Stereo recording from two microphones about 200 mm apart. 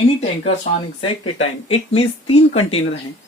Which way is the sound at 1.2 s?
90° left.